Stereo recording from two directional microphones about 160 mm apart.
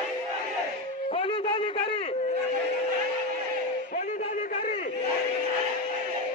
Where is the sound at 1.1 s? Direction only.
35° left (ahead or behind).